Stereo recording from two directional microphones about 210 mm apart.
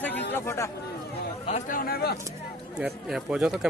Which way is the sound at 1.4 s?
35° left (ahead or behind).